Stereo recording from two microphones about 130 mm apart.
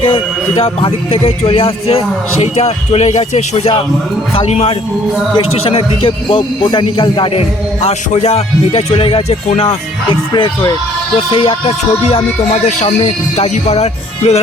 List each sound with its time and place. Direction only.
0.0 s a man's voice: 45° left (ahead or behind)
12.6 s music: 55° left (ahead or behind)